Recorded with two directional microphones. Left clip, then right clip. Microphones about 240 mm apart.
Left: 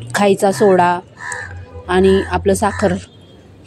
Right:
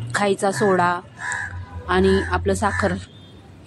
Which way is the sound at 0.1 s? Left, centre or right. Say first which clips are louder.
Left 7 dB; centre.